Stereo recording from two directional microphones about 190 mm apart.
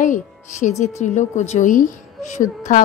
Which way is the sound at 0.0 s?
40° left (ahead or behind).